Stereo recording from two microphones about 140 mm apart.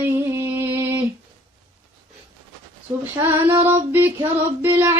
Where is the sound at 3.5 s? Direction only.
15° right (ahead or behind).